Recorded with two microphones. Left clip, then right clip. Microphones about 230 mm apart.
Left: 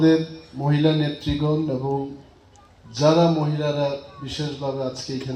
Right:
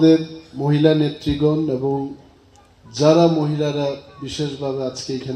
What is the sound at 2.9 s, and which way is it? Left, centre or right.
A man's voice, right.